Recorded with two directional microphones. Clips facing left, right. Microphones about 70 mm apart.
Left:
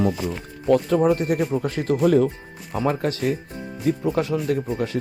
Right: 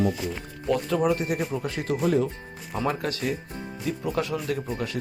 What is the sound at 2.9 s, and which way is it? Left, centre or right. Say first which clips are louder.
Speech: left 5 dB; left.